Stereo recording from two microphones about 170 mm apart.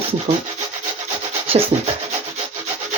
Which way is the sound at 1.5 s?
35° right (ahead or behind).